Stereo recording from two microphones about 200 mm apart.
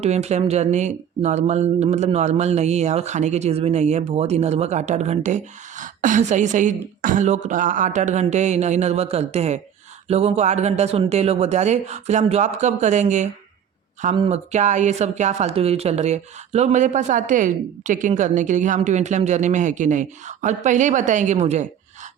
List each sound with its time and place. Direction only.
0.0 s speech: 35° right (ahead or behind)